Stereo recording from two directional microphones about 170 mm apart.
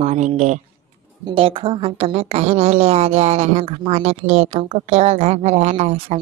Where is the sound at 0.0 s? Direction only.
40° right (ahead or behind).